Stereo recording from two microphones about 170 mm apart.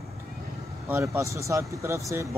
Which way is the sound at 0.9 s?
15° right (ahead or behind).